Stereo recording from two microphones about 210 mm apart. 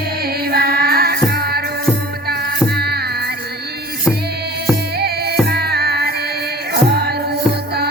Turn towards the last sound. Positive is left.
turn(degrees=-50)  # may be behind; listen again after turning